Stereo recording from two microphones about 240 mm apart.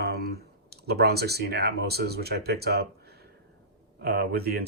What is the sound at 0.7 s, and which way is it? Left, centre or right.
Speech, right.